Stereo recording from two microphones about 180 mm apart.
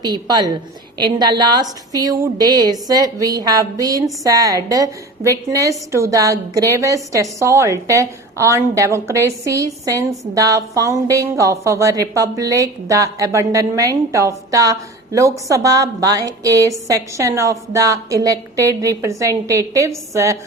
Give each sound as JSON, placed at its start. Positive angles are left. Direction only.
{"t": 0.0, "sound": "a woman's voice", "side_deg": -25}